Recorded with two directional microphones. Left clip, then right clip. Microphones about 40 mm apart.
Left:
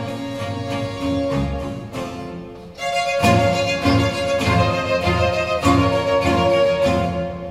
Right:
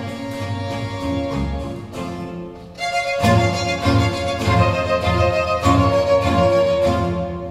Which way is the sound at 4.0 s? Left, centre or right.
Left.